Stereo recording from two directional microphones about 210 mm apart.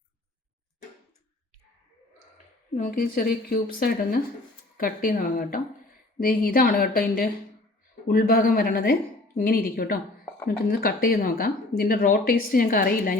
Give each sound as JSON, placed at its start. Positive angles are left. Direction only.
{"t": 2.7, "sound": "speech", "side_deg": 40}